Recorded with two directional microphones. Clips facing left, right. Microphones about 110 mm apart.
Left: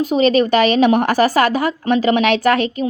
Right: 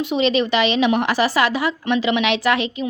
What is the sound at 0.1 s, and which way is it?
A woman's voice, 45° left (ahead or behind).